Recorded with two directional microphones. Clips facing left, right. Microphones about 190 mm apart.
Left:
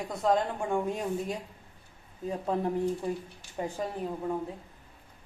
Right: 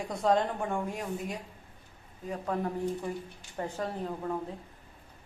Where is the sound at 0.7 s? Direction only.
25° left (ahead or behind).